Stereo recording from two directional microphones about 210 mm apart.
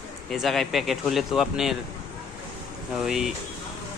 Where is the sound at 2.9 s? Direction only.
5° right (ahead or behind).